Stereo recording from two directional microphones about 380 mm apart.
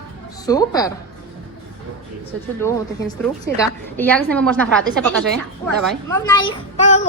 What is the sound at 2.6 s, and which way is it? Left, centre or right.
A woman's voice, centre.